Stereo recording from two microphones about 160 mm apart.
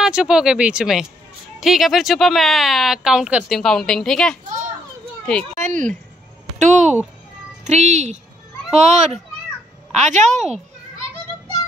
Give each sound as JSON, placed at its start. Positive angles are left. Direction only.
{"t": 0.0, "sound": "speech", "side_deg": -5}
{"t": 5.4, "sound": "speech", "side_deg": -45}